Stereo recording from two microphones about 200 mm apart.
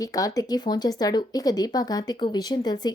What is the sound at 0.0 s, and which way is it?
Speech, 15° left (ahead or behind).